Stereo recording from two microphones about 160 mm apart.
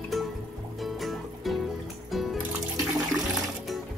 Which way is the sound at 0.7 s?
Centre (ahead or behind).